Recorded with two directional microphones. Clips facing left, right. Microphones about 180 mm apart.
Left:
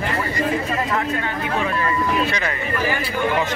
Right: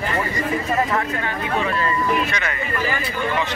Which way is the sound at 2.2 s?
30° left (ahead or behind).